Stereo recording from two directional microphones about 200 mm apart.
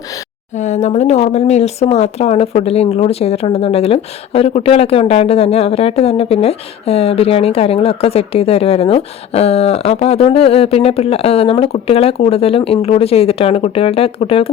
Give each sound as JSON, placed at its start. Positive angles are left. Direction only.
{"t": 0.5, "sound": "speech", "side_deg": 35}